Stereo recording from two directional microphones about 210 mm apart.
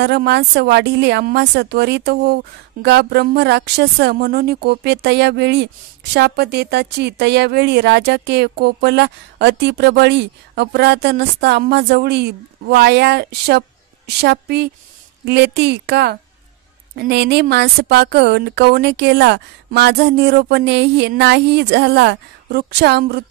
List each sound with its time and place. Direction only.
0.0 s speech: 50° right (ahead or behind)